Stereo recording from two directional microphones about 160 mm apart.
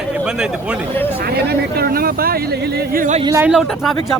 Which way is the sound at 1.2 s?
80° right.